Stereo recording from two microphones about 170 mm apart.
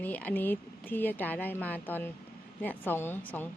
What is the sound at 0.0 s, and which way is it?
Speech, 10° left (ahead or behind).